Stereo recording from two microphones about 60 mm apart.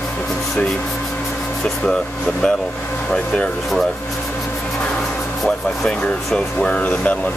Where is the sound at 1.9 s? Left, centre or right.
Centre.